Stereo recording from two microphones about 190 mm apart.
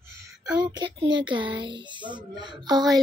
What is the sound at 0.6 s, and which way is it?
Speech, 25° right (ahead or behind).